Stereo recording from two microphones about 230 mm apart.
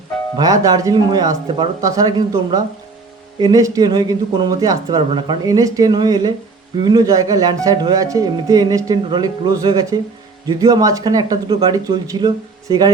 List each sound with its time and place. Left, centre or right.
0.3 s speech: centre